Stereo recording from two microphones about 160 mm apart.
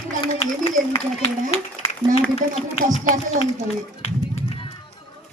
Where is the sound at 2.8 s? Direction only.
55° right (ahead or behind).